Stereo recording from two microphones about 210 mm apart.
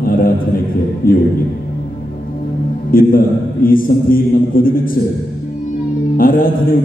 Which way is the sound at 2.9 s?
45° left (ahead or behind).